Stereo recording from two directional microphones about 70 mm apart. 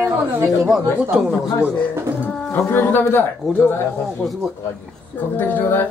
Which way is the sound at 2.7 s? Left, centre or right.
Left.